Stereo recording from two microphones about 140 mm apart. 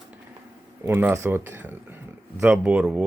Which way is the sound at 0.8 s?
15° right (ahead or behind).